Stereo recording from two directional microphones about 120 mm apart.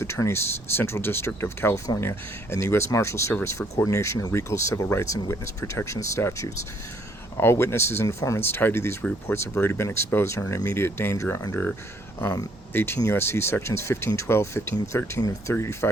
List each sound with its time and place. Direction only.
0.0 s speech: 20° left (ahead or behind)